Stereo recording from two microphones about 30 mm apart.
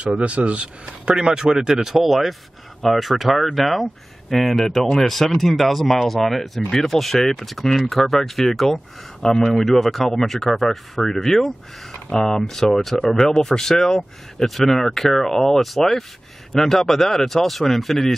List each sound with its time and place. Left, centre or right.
0.0 s speech: right
1.1 s speech: right
2.0 s speech: centre
9.2 s speech: centre
9.7 s speech: centre
11.9 s speech: left